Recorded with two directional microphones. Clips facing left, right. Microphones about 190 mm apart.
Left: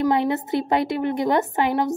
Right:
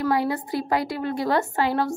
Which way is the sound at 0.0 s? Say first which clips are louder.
Left 3 dB; 20° left (ahead or behind).